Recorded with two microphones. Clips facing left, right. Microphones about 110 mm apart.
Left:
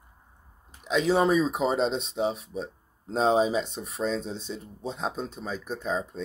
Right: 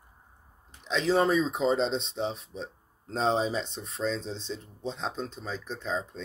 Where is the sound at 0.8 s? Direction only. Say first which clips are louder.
Left 2 dB; 10° left (ahead or behind).